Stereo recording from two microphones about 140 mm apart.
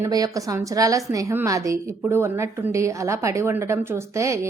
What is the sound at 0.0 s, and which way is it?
A woman's voice, 25° right (ahead or behind).